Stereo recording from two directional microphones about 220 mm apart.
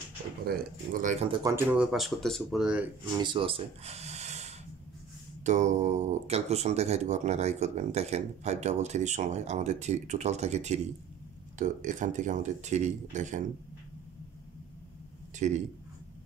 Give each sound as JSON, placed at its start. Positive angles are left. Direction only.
{"t": 0.5, "sound": "speech", "side_deg": -40}
{"t": 1.4, "sound": "speech", "side_deg": -10}
{"t": 3.1, "sound": "speech", "side_deg": -20}
{"t": 15.3, "sound": "a man's voice", "side_deg": -35}